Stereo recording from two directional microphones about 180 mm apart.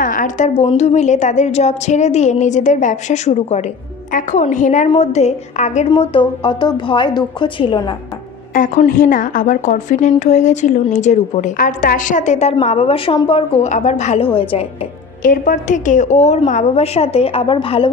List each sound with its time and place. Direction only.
0.0 s a woman's voice: 45° left (ahead or behind)
5.9 s a woman's voice: 30° left (ahead or behind)
8.5 s a woman's voice: 45° left (ahead or behind); by 14.7 s 30° left (ahead or behind)
15.2 s a woman's voice: 50° left (ahead or behind); by 17.8 s 30° left (ahead or behind)